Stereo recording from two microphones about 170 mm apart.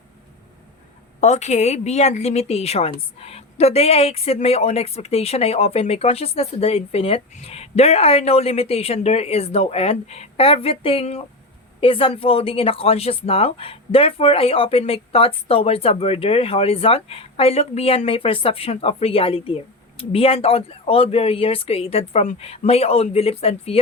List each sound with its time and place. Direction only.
1.2 s a woman's voice: 40° left (ahead or behind)